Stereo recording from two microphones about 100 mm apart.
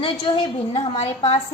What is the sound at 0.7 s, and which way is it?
Speech, 80° left.